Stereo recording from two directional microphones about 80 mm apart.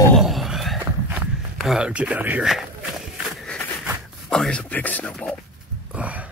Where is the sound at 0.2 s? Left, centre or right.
Centre.